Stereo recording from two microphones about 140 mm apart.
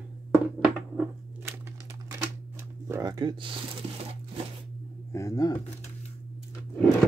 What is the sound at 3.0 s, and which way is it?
Speech, 30° right (ahead or behind).